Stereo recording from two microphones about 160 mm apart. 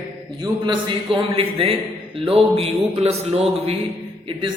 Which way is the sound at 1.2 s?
35° right (ahead or behind).